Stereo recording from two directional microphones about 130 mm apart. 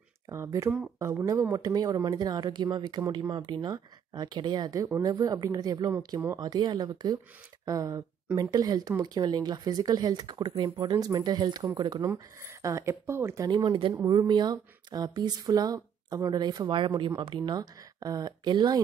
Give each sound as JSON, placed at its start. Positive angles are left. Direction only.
{"t": 0.3, "sound": "speech", "side_deg": -25}
{"t": 12.1, "sound": "speech", "side_deg": -20}
{"t": 13.5, "sound": "speech", "side_deg": -40}